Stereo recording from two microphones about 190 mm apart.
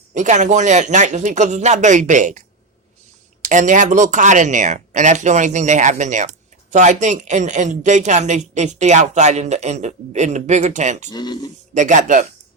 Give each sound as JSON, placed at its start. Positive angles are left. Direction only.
{"t": 0.1, "sound": "speech", "side_deg": -40}
{"t": 3.4, "sound": "speech", "side_deg": -40}
{"t": 11.1, "sound": "speech", "side_deg": 20}
{"t": 11.7, "sound": "speech", "side_deg": -40}